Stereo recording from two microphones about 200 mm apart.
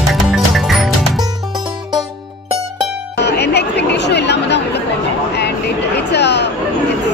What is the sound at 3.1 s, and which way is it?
Chatter, 55° left (ahead or behind).